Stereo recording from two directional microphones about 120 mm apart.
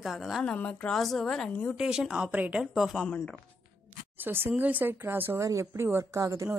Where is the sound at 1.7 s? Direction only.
5° right (ahead or behind).